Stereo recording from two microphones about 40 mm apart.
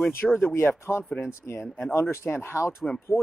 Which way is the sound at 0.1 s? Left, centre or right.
Left.